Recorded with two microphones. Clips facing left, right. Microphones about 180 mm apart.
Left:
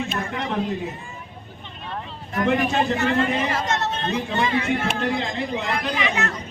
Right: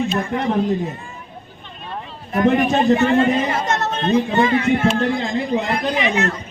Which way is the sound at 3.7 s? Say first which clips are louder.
Right 6 dB; 50° right (ahead or behind).